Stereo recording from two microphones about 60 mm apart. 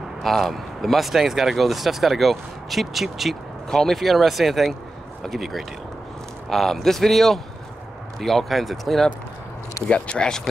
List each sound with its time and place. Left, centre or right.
0.2 s speech: centre
9.8 s speech: centre